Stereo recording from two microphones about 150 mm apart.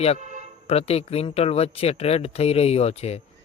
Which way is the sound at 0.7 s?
45° left (ahead or behind).